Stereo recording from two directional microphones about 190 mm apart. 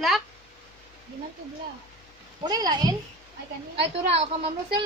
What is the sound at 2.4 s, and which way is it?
Speech, 20° right (ahead or behind).